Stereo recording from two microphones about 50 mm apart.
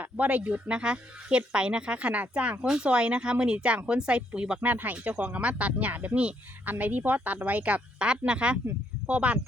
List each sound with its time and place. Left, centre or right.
0.0 s speech: right
4.6 s speech: right